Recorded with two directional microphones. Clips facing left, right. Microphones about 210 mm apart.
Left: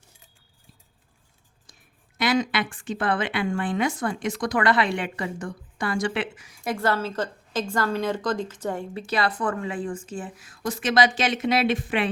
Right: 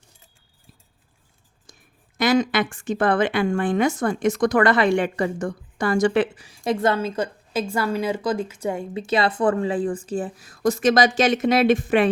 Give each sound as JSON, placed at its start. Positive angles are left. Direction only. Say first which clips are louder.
{"t": 2.1, "sound": "speech", "louder": "right 4 dB", "side_deg": -45}